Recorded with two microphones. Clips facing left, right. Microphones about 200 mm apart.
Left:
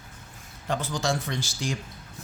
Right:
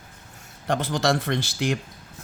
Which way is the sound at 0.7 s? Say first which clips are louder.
Right 5 dB; 60° right (ahead or behind).